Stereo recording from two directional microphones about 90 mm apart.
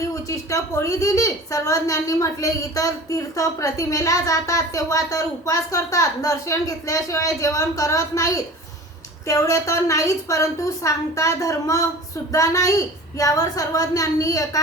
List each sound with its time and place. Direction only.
0.1 s a woman's voice: 35° left (ahead or behind)